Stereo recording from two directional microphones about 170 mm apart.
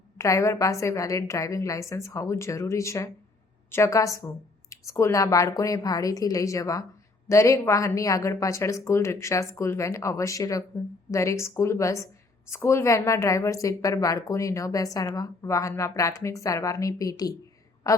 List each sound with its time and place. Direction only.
0.2 s a woman's voice: 15° left (ahead or behind)